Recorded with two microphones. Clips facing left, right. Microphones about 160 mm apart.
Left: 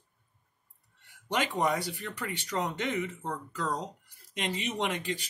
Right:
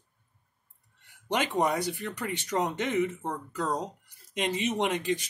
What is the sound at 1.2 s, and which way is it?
Speech, 20° right (ahead or behind).